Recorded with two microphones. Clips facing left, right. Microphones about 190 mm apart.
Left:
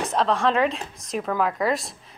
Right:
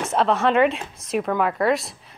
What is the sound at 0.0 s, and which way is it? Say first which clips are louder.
A woman's voice: right 2 dB; 5° right (ahead or behind).